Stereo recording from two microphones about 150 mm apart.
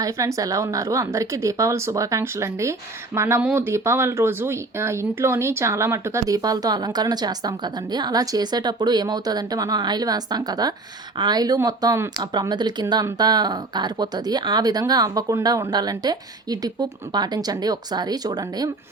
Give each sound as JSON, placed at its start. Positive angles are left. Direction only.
{"t": 0.0, "sound": "speech", "side_deg": -20}